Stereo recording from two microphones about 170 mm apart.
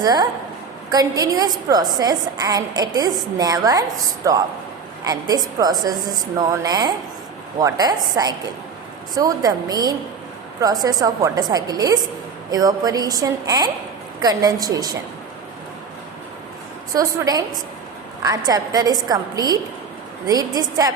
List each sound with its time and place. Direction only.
0.0 s a woman's voice: 25° right (ahead or behind)
16.9 s a woman's voice: 20° right (ahead or behind)